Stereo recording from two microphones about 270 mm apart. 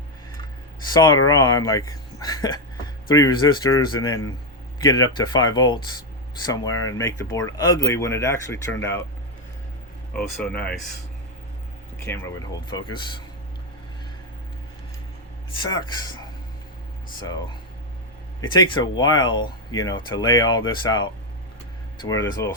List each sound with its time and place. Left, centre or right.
0.9 s speech: centre
10.4 s speech: centre
11.9 s speech: centre
15.6 s speech: centre
18.3 s speech: centre